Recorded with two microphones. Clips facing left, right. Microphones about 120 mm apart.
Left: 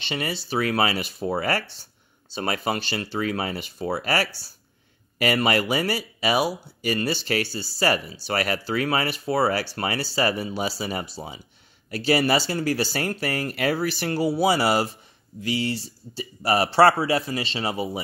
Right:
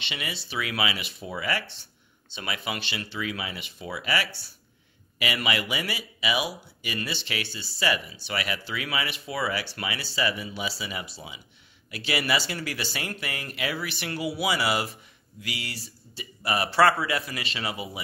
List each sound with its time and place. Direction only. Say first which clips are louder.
0.1 s speech: left 8 dB; 40° left (ahead or behind)
13.9 s speech: left 7 dB; 35° left (ahead or behind)